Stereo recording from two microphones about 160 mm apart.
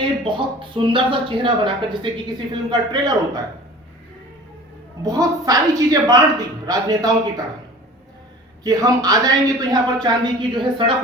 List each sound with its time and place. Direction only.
0.3 s a woman's voice: 30° right (ahead or behind)
5.0 s a woman's voice: 20° right (ahead or behind)
8.6 s a woman's voice: 25° right (ahead or behind)